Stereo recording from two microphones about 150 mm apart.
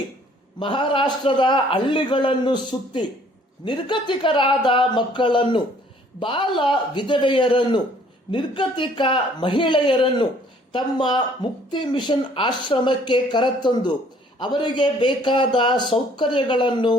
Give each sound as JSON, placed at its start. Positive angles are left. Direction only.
{"t": 0.6, "sound": "a man's voice", "side_deg": 35}